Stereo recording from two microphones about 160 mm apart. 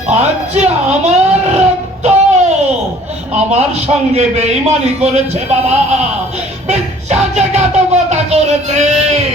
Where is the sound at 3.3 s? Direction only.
45° right (ahead or behind).